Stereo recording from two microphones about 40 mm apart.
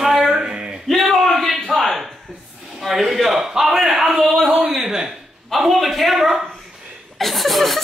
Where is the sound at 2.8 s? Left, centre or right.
Centre.